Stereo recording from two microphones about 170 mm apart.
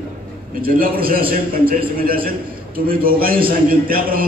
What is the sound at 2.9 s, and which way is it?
A man's voice, 60° right (ahead or behind).